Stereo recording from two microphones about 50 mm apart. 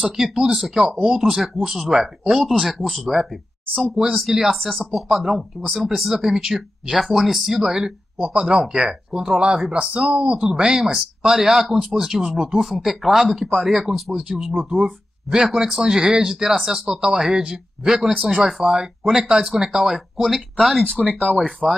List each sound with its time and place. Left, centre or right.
0.0 s speech: centre
0.8 s speech: centre
1.7 s speech: centre
4.1 s speech: centre
21.6 s speech: centre